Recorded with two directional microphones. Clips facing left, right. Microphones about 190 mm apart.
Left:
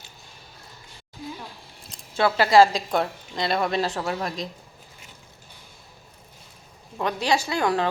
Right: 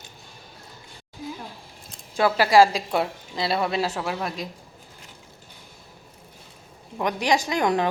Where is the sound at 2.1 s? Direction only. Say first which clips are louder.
Even; 10° right (ahead or behind).